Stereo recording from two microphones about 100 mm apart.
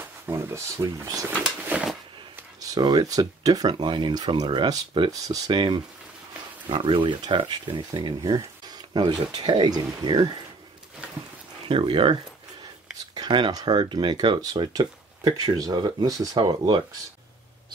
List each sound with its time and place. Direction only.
0.3 s speech: 25° right (ahead or behind)
1.3 s speech: 15° right (ahead or behind)
2.7 s speech: 40° right (ahead or behind)
11.6 s speech: 60° right (ahead or behind)
13.1 s speech: 50° right (ahead or behind)